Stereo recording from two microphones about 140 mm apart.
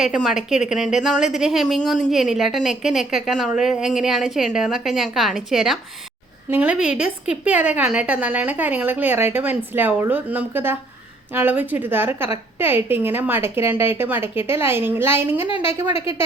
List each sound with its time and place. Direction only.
0.0 s a woman's voice: 5° right (ahead or behind)